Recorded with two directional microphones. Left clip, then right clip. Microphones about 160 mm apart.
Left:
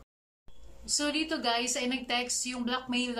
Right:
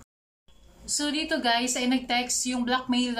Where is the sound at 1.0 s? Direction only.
5° left (ahead or behind).